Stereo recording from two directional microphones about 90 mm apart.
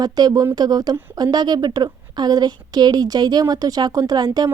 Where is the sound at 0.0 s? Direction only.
45° right (ahead or behind).